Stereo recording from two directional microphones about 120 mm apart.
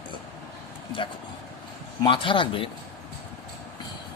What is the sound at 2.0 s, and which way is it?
Speech, 45° left (ahead or behind).